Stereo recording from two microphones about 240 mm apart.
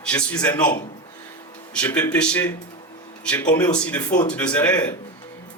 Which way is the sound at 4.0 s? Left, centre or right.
Centre.